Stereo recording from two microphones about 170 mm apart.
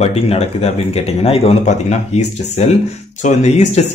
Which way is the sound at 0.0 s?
35° left (ahead or behind).